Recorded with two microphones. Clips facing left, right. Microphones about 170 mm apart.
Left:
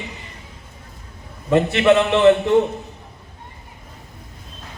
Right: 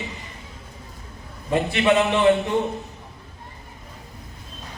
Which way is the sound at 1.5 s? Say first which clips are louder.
Left 5 dB; 55° left (ahead or behind).